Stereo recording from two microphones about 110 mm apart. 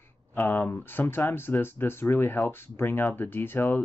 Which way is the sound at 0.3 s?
20° left (ahead or behind).